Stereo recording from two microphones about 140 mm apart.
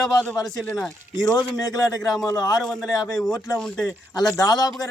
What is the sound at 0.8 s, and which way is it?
A man's voice, 25° left (ahead or behind).